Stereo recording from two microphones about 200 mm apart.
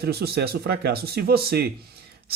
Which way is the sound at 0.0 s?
50° right (ahead or behind).